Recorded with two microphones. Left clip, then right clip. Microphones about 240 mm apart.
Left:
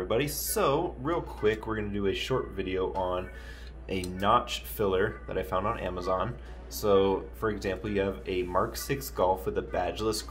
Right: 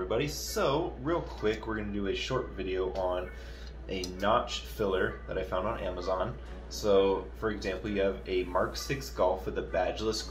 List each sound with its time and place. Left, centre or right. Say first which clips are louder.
0.1 s speech: left 5 dB; left